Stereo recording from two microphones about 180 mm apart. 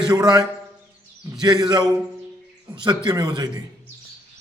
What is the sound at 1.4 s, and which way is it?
A man's voice, 25° right (ahead or behind).